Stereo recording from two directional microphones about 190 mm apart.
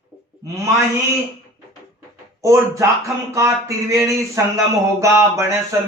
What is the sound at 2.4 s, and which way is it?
A man's voice, 15° right (ahead or behind).